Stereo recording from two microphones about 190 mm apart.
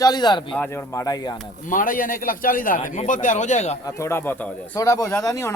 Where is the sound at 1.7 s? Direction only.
45° left (ahead or behind).